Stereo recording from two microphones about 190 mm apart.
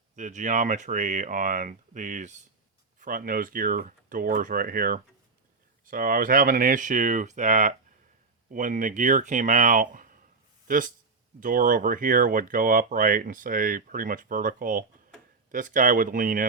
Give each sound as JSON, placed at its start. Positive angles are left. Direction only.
{"t": 0.2, "sound": "speech", "side_deg": -40}